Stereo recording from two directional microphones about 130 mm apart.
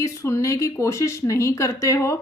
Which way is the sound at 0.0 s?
20° left (ahead or behind).